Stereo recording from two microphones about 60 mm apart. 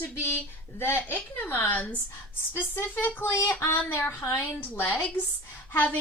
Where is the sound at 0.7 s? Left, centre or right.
Left.